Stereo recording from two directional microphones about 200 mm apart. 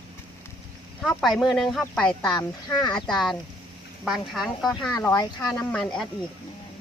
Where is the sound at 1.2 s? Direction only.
Centre (ahead or behind).